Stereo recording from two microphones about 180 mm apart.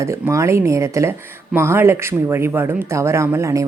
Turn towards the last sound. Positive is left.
turn(degrees=-15)  # may be behind; listen again after turning